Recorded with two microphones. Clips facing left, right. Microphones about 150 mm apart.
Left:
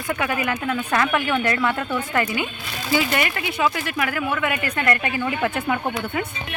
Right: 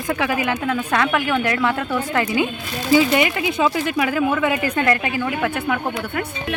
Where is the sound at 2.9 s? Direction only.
15° right (ahead or behind).